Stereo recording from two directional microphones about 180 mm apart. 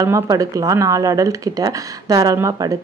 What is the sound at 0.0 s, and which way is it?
Speech, 20° right (ahead or behind).